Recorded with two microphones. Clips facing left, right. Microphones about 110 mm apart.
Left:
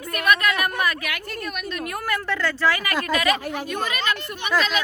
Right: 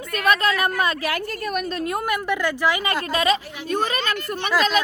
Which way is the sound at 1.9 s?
20° right (ahead or behind).